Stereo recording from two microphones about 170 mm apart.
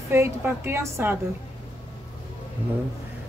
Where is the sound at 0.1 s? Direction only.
15° right (ahead or behind).